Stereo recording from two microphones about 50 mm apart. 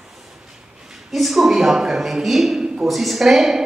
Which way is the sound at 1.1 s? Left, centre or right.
Centre.